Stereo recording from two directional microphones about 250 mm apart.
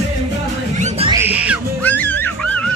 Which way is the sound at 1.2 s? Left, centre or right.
Centre.